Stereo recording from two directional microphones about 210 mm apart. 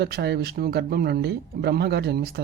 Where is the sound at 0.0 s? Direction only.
50° right (ahead or behind).